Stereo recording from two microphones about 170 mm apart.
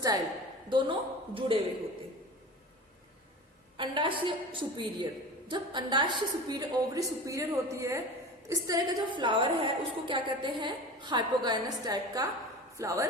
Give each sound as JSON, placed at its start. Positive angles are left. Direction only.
{"t": 0.7, "sound": "speech", "side_deg": -25}
{"t": 3.8, "sound": "a woman's voice", "side_deg": -30}